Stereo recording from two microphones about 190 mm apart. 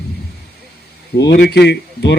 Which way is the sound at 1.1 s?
60° left (ahead or behind).